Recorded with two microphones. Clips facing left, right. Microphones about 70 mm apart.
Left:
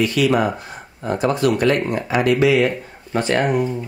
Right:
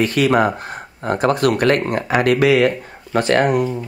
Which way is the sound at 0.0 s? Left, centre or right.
Right.